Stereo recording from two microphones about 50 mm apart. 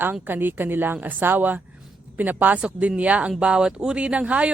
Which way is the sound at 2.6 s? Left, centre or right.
Right.